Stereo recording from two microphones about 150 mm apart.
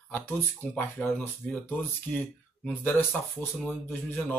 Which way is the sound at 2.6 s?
10° left (ahead or behind).